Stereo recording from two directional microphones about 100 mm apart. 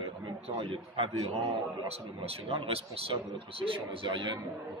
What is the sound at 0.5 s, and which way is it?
Speech, 60° right (ahead or behind).